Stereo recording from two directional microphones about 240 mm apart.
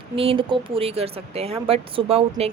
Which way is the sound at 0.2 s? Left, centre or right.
Right.